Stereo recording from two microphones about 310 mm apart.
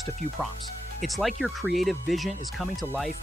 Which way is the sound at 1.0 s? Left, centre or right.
Centre.